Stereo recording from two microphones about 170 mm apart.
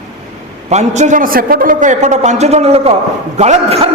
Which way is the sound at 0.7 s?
40° right (ahead or behind).